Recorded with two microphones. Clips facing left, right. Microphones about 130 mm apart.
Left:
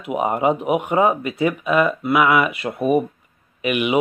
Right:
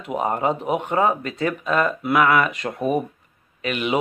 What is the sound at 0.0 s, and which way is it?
Speech, 10° left (ahead or behind).